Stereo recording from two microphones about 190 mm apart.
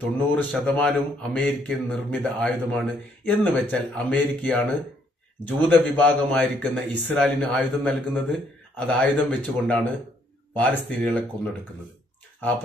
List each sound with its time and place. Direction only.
0.3 s a man's voice: 10° left (ahead or behind)